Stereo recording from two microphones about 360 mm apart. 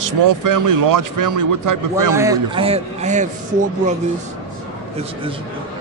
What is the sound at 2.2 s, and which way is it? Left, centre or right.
A man's voice, centre.